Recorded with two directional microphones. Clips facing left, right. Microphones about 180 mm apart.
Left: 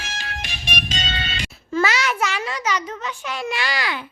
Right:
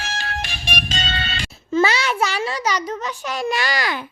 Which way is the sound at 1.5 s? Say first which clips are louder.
Right 3 dB; 25° right (ahead or behind).